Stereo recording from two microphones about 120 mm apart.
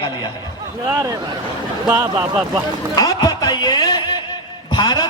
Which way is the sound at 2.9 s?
35° left (ahead or behind).